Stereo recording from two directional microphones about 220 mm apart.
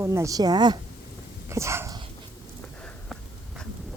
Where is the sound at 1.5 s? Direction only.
10° right (ahead or behind).